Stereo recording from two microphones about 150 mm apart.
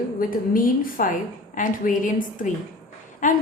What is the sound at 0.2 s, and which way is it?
A woman's voice, 65° left (ahead or behind).